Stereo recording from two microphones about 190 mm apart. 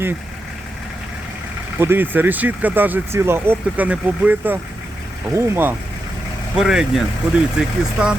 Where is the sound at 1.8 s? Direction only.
10° right (ahead or behind).